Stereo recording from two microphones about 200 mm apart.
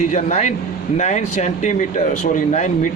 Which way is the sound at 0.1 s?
35° left (ahead or behind).